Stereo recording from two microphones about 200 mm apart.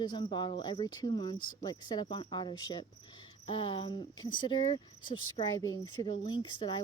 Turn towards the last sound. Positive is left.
turn(degrees=20)  # may be behind; listen again after turning